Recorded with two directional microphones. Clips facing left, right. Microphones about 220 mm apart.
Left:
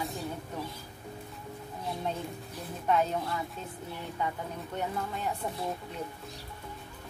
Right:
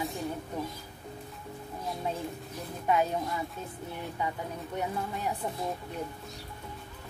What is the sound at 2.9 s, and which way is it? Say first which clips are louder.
Speech: even; 10° right (ahead or behind).